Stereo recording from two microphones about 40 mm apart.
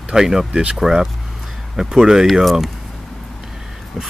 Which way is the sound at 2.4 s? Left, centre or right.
Centre.